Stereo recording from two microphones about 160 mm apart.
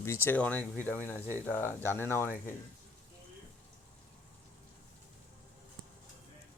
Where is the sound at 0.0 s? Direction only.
15° left (ahead or behind).